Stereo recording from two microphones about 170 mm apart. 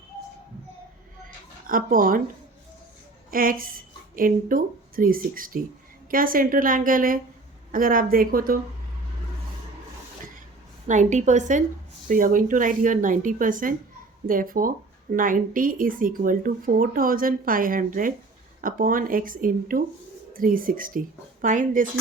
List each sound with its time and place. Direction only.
1.6 s speech: 55° right (ahead or behind)
3.3 s speech: 55° right (ahead or behind)
10.8 s speech: 45° right (ahead or behind)